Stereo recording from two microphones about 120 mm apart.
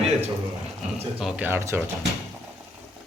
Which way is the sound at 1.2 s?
15° right (ahead or behind).